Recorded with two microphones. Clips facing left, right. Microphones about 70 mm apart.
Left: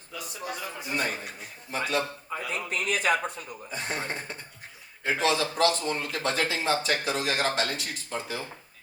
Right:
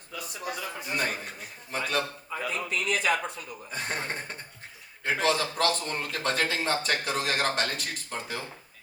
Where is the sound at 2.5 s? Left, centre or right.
Left.